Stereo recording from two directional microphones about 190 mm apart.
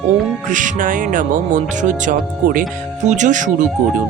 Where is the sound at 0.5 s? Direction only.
45° right (ahead or behind).